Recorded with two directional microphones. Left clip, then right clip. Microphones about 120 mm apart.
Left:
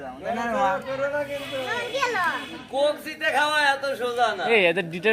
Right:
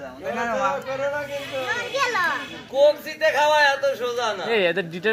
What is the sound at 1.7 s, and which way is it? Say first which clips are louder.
Speech: right 2 dB; 10° left (ahead or behind).